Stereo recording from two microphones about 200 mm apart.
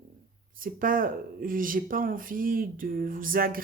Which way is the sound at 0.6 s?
45° right (ahead or behind).